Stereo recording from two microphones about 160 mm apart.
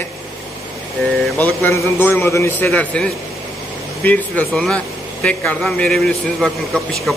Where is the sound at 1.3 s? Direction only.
10° left (ahead or behind).